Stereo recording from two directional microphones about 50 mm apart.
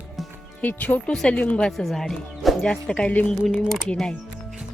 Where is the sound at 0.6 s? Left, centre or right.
Left.